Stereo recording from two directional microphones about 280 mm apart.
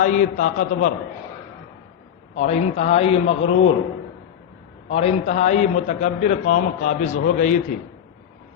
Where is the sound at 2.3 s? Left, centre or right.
Left.